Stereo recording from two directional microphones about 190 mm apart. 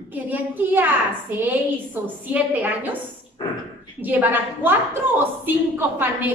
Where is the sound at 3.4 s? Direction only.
20° left (ahead or behind).